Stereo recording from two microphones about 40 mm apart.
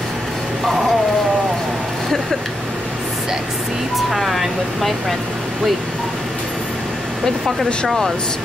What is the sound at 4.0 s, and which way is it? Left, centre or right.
Speech, centre.